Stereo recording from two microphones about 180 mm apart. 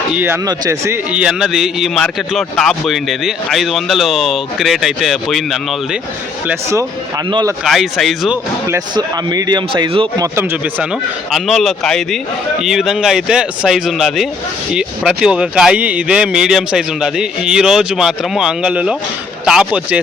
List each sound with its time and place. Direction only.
0.1 s a man's voice: 10° right (ahead or behind)
6.5 s speech: 15° right (ahead or behind)
7.6 s a man's voice: centre (ahead or behind)
8.6 s speech: 20° right (ahead or behind)
10.3 s speech: 10° right (ahead or behind)
11.3 s a man's voice: centre (ahead or behind)